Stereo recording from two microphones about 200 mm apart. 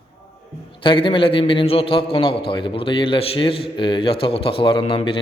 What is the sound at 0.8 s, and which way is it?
A man's voice, 25° left (ahead or behind).